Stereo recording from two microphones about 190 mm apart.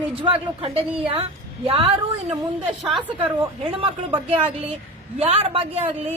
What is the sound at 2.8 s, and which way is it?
Speech, centre (ahead or behind).